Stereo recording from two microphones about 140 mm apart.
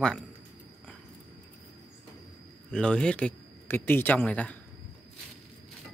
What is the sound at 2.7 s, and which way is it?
Speech, 5° left (ahead or behind).